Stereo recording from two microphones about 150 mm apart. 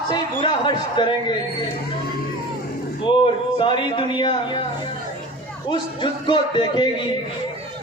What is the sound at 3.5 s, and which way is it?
A man's voice, 30° left (ahead or behind).